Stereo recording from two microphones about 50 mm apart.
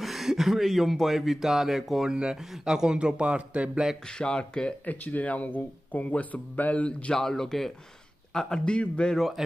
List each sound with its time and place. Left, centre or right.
0.0 s a man's voice: centre; by 3.8 s right
4.1 s speech: centre
4.8 s speech: left
7.2 s a man's voice: centre
9.1 s speech: centre